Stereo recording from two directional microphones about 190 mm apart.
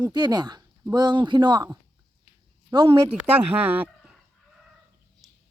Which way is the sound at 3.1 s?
10° right (ahead or behind).